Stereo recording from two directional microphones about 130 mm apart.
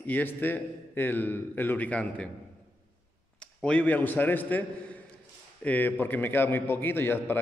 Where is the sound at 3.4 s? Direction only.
10° left (ahead or behind).